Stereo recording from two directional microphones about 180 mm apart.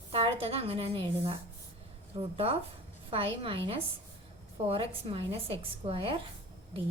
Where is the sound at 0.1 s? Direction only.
35° right (ahead or behind).